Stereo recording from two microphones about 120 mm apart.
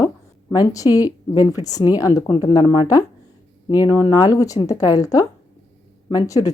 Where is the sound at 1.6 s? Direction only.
30° left (ahead or behind).